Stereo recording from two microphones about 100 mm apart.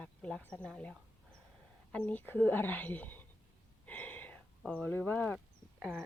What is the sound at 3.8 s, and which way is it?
Gasp, 15° left (ahead or behind).